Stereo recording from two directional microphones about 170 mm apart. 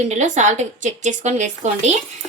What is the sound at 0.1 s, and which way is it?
Speech, 45° right (ahead or behind).